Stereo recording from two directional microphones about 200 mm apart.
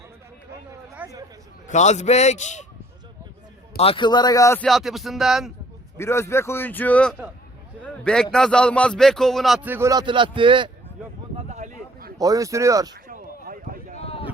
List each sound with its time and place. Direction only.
0.9 s chatter: 15° right (ahead or behind)
1.6 s a man's voice: 35° left (ahead or behind)
3.8 s a man's voice: 25° left (ahead or behind)
4.6 s speech: centre (ahead or behind)
6.0 s a man's voice: 15° left (ahead or behind); by 10.7 s 25° right (ahead or behind)
11.3 s a sound: 35° right (ahead or behind)
12.1 s speech: 20° right (ahead or behind)
13.1 s a sound: 45° right (ahead or behind)
13.9 s a sound: 30° left (ahead or behind)